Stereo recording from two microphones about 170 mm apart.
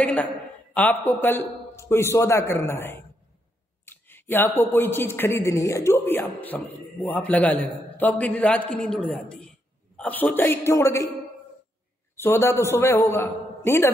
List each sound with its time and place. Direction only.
0.0 s speech: 10° left (ahead or behind)
12.2 s speech: 15° left (ahead or behind)